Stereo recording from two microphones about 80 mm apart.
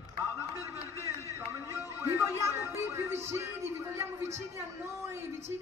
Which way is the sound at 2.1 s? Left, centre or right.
Right.